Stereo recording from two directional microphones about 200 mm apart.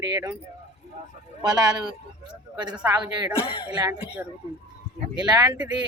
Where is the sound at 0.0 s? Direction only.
20° right (ahead or behind).